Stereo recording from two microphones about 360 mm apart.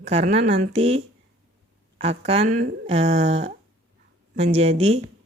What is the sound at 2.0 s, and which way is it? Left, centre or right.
Speech, centre.